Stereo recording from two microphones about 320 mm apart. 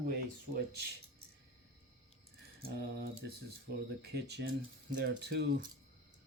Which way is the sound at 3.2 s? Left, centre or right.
Right.